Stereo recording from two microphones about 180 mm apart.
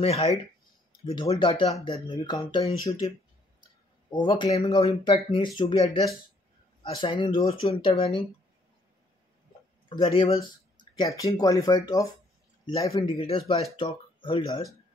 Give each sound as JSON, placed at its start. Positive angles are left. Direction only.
{"t": 0.0, "sound": "speech", "side_deg": 35}
{"t": 4.1, "sound": "speech", "side_deg": 25}
{"t": 9.8, "sound": "speech", "side_deg": 30}
{"t": 13.2, "sound": "speech", "side_deg": 30}